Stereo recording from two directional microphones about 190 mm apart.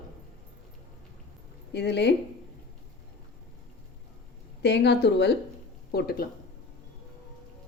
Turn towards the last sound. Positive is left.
turn(degrees=55)  # may be behind; listen again after turning